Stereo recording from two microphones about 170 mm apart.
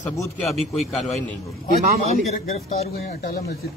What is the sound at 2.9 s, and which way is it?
Speech, 65° left (ahead or behind).